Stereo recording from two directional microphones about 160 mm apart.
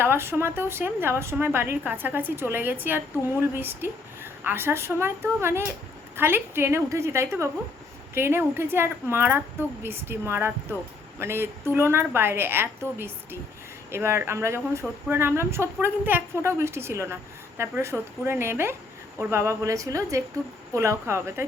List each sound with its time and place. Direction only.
0.0 s a woman's voice: 15° right (ahead or behind)